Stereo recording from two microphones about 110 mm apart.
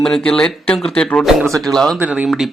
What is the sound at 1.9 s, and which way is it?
Speech, 15° right (ahead or behind).